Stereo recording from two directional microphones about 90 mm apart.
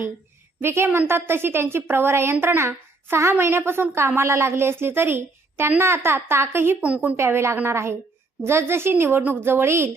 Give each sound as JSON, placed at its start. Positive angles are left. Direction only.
{"t": 0.6, "sound": "a woman's voice", "side_deg": -25}
{"t": 6.8, "sound": "a woman's voice", "side_deg": -15}
{"t": 7.2, "sound": "a woman's voice", "side_deg": -30}